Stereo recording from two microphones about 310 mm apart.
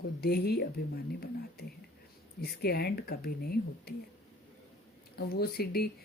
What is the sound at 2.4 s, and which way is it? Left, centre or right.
Speech, left.